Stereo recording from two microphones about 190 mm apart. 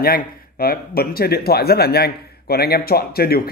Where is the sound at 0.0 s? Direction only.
50° left (ahead or behind).